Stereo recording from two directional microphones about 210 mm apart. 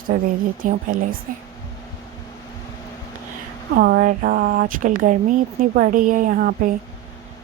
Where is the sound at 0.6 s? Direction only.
40° right (ahead or behind).